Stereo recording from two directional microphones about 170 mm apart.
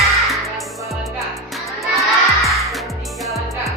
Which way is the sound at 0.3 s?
Centre (ahead or behind).